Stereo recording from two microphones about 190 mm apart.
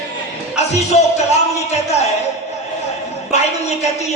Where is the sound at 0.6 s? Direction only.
35° left (ahead or behind).